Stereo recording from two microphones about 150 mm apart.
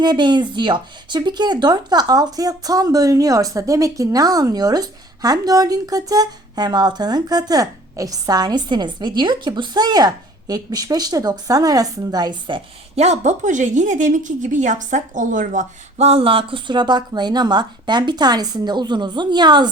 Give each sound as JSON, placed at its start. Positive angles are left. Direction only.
{"t": 0.0, "sound": "speech", "side_deg": -30}